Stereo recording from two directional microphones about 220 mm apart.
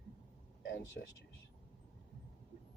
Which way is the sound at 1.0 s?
50° left (ahead or behind).